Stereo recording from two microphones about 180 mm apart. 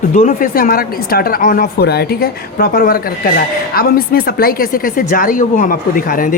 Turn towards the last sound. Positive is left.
turn(degrees=50)  # may be behind; listen again after turning